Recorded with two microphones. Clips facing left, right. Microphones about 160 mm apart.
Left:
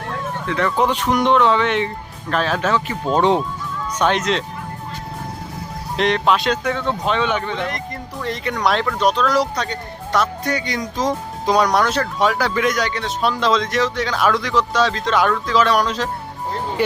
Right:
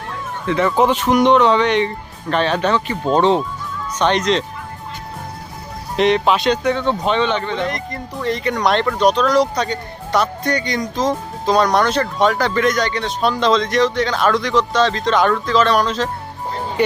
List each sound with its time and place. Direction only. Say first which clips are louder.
0.4 s speech: right 4 dB; 5° right (ahead or behind)
6.0 s speech: right 3 dB; centre (ahead or behind)